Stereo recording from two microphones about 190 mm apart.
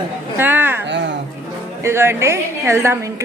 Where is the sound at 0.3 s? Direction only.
10° right (ahead or behind).